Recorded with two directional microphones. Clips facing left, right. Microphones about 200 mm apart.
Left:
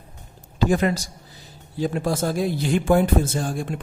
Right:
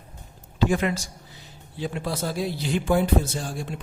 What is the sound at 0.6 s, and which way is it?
A man's voice, 40° left (ahead or behind).